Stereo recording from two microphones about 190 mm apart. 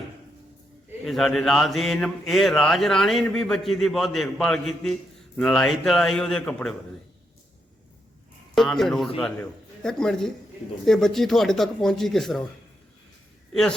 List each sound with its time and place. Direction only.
1.0 s speech: centre (ahead or behind)
8.5 s speech: centre (ahead or behind)
13.5 s a man's voice: centre (ahead or behind)